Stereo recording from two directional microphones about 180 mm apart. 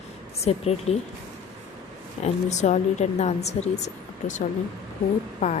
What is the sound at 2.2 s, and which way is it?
Speech, 40° left (ahead or behind).